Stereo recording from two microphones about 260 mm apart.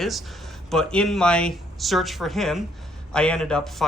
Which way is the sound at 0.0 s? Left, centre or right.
Centre.